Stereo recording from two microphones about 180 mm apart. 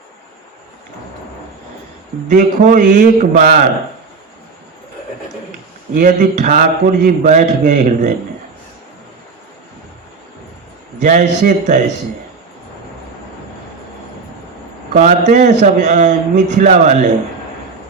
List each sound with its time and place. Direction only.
2.3 s a man's voice: 45° right (ahead or behind)
5.9 s a man's voice: 45° right (ahead or behind)
11.0 s a man's voice: 45° right (ahead or behind)
14.9 s a man's voice: 40° right (ahead or behind)